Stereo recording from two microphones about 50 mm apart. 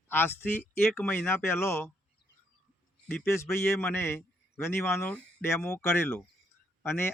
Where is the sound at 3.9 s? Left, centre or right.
Left.